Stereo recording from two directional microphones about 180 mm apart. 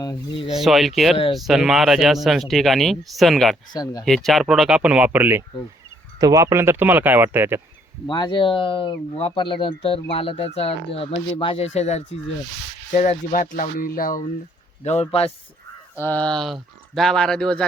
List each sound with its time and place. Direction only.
0.0 s speech: 20° left (ahead or behind)
0.5 s speech: centre (ahead or behind)
3.7 s speech: 20° left (ahead or behind)
4.0 s speech: centre (ahead or behind)
8.0 s speech: 25° left (ahead or behind); by 14.3 s 50° left (ahead or behind)
14.8 s speech: 35° left (ahead or behind)
16.0 s speech: 10° left (ahead or behind)